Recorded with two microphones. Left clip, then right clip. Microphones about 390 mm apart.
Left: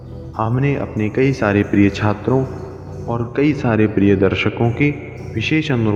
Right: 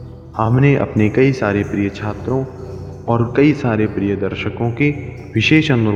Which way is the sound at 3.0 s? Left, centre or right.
Right.